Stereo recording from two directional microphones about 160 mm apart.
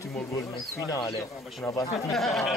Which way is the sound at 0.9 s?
20° left (ahead or behind).